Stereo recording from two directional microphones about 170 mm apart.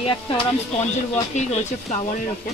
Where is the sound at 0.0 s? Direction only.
35° left (ahead or behind).